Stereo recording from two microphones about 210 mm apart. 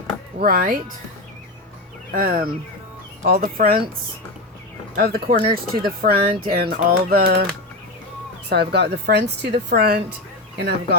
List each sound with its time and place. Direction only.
0.3 s speech: 45° right (ahead or behind)
2.1 s speech: 45° right (ahead or behind)
4.9 s speech: 45° right (ahead or behind)
5.4 s speech: 20° right (ahead or behind)
6.0 s speech: 45° right (ahead or behind)
8.4 s speech: 50° right (ahead or behind)